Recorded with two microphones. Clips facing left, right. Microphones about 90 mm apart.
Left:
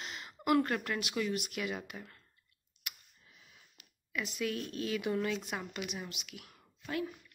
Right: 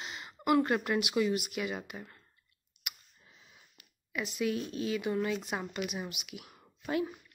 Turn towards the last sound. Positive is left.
turn(degrees=-20)  # may be behind; listen again after turning